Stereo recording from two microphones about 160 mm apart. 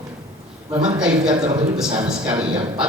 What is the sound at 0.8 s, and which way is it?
A man's voice, 5° right (ahead or behind).